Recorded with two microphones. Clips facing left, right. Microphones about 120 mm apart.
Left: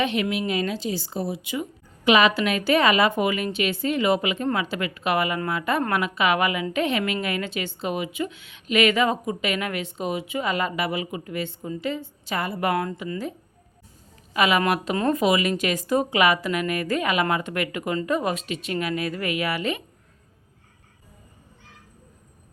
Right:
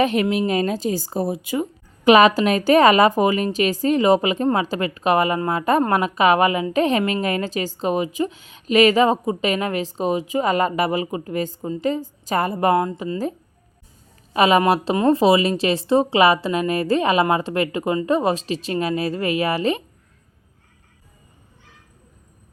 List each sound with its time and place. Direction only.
0.0 s a woman's voice: 40° right (ahead or behind)
12.7 s a woman's voice: 20° right (ahead or behind)
14.3 s a woman's voice: 35° right (ahead or behind)